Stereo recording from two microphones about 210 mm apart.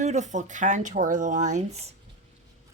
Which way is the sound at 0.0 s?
35° right (ahead or behind).